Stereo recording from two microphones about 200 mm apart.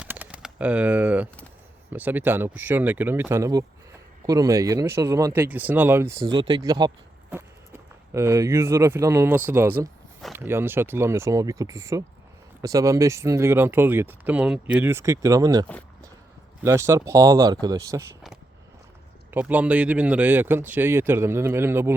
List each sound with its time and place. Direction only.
0.0 s bird: 5° right (ahead or behind)
1.9 s speech: 10° right (ahead or behind)
16.6 s speech: 15° right (ahead or behind)
19.3 s speech: 10° right (ahead or behind)